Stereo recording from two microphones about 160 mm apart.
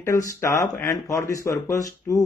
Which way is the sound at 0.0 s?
20° left (ahead or behind).